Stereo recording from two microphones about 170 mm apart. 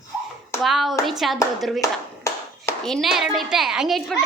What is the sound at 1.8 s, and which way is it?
Clapping, 20° left (ahead or behind).